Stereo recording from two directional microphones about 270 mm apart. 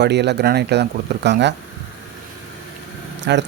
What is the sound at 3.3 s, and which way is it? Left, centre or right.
Speech, right.